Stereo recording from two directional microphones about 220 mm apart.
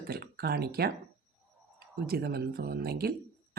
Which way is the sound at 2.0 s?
45° right (ahead or behind).